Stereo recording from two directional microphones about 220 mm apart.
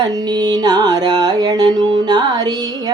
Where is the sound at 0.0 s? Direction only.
20° right (ahead or behind).